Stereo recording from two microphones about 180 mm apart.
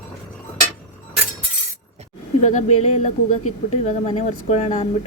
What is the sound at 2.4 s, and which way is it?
Speech, 40° left (ahead or behind).